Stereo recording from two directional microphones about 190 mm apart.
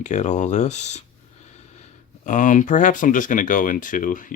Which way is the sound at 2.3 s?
40° left (ahead or behind).